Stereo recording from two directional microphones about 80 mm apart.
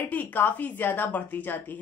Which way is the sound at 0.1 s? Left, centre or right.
Left.